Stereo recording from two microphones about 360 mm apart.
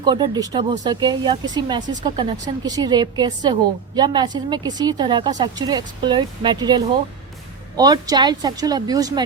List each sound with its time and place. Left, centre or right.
0.0 s a woman's voice: centre